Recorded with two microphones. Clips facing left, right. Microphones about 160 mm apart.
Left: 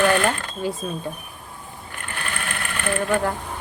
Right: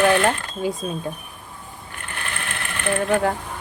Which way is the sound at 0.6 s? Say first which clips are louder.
Right 2 dB; 15° right (ahead or behind).